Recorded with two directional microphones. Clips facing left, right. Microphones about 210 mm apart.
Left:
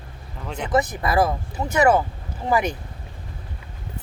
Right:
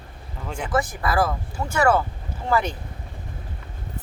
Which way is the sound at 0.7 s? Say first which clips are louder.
Left 3 dB; 20° left (ahead or behind).